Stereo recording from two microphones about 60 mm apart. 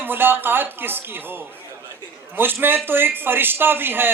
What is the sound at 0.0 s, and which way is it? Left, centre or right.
A man's voice, right.